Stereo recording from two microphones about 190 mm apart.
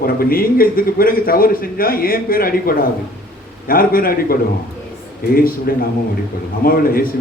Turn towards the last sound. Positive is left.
turn(degrees=50)  # may be behind; listen again after turning